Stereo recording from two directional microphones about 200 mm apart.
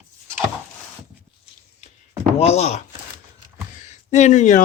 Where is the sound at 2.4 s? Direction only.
30° left (ahead or behind).